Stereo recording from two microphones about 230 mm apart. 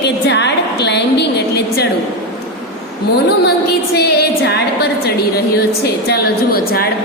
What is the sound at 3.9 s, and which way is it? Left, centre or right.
A woman's voice, left.